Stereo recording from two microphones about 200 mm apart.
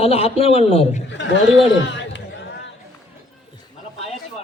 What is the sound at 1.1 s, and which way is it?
A man's voice, 65° left (ahead or behind).